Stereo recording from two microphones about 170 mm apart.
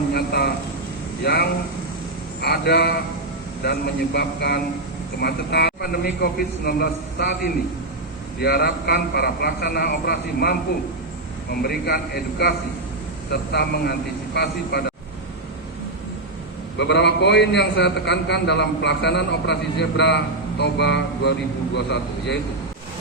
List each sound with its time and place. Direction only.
0.1 s a sound: 70° left (ahead or behind)
1.2 s a man's voice: 70° left (ahead or behind)
8.4 s a man's voice: 70° left (ahead or behind)
11.6 s a man's voice: 65° left (ahead or behind)
16.7 s a man's voice: 90° left